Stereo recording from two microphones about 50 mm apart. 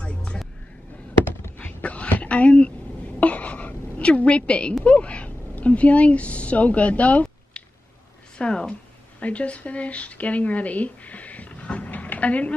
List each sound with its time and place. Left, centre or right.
0.0 s music: left
1.7 s a sound: left
4.8 s a woman's voice: left